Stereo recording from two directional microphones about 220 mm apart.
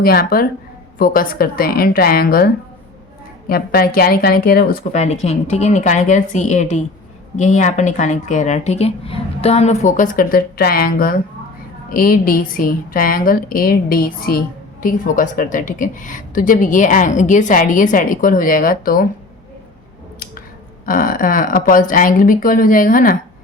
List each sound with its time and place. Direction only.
0.0 s a woman's voice: 45° left (ahead or behind)
20.8 s a woman's voice: 40° left (ahead or behind)